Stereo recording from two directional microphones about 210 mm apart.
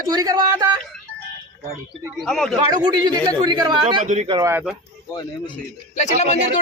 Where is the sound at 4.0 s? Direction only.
35° right (ahead or behind).